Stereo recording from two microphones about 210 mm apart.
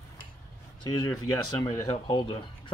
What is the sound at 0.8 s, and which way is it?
Speech, 20° left (ahead or behind).